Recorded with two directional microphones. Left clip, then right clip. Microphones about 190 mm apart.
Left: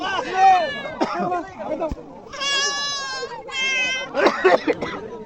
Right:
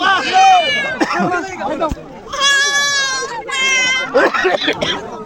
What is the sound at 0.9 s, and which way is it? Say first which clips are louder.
Speech: right 7 dB; 80° right.